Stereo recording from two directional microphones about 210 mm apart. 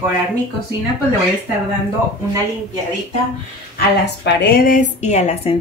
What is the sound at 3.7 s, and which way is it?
Speech, 55° left (ahead or behind).